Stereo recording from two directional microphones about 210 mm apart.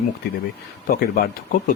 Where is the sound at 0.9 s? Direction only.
45° left (ahead or behind).